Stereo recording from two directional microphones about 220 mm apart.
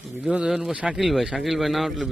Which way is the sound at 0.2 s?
5° right (ahead or behind).